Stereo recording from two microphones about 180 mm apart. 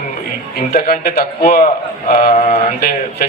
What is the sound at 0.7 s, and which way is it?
A man's voice, 55° left (ahead or behind).